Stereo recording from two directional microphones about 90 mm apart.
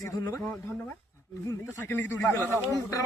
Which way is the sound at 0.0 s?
40° left (ahead or behind).